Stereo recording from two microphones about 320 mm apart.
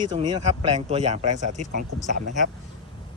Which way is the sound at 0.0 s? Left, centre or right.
Centre.